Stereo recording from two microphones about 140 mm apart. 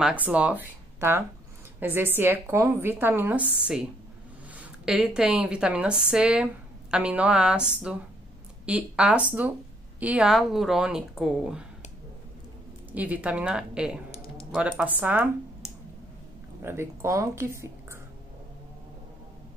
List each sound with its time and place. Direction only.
0.0 s a woman's voice: 10° right (ahead or behind)
12.9 s a woman's voice: 10° right (ahead or behind)
16.6 s speech: 20° right (ahead or behind)